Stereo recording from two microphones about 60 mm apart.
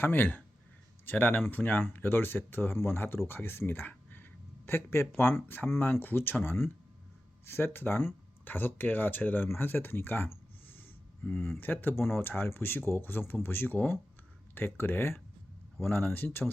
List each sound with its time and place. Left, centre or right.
0.0 s speech: left